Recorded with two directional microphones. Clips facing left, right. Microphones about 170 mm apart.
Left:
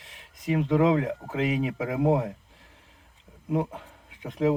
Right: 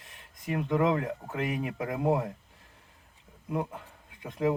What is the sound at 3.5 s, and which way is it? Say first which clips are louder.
Speech: left 5 dB; 20° left (ahead or behind).